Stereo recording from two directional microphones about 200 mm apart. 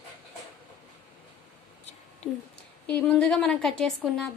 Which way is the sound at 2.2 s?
35° left (ahead or behind).